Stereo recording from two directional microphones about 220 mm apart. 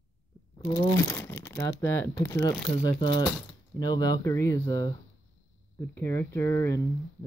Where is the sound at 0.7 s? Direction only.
20° left (ahead or behind).